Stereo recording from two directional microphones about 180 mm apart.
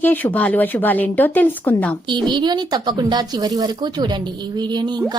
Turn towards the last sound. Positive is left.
turn(degrees=-25)  # may be behind; listen again after turning